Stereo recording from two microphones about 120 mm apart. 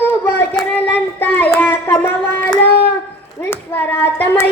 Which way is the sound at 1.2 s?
15° left (ahead or behind).